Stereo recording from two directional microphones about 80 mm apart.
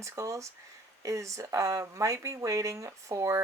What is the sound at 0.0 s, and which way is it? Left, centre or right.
Speech, right.